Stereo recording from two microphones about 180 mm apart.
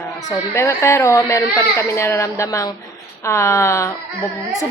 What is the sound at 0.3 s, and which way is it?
A child's voice, 15° left (ahead or behind).